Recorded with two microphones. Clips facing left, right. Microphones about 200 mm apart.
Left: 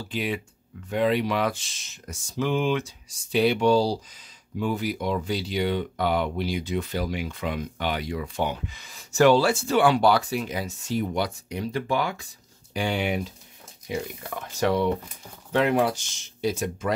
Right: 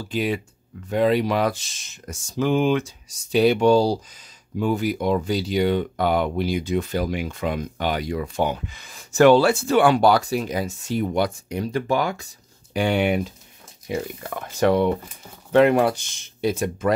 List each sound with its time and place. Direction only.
0.1 s speech: 40° right (ahead or behind)
12.7 s speech: 60° right (ahead or behind)